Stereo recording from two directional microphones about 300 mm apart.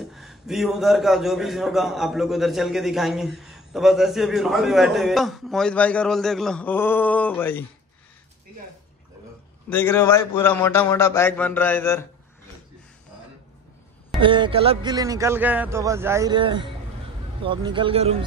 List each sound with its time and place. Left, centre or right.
0.1 s a man's voice: centre
9.7 s a man's voice: centre
14.2 s speech: centre